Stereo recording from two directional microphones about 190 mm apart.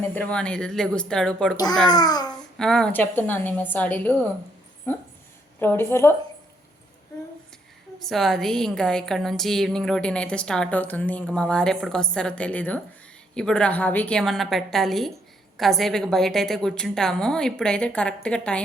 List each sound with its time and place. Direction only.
0.0 s a woman's voice: 10° left (ahead or behind)
1.5 s a child's voice: 20° left (ahead or behind)
2.6 s a woman's voice: 5° left (ahead or behind)
7.9 s a woman's voice: centre (ahead or behind)